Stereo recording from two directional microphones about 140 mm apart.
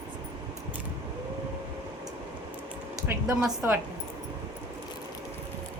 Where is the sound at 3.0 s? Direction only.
20° right (ahead or behind).